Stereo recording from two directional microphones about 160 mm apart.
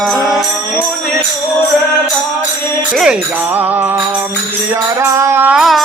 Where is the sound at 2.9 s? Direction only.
5° right (ahead or behind).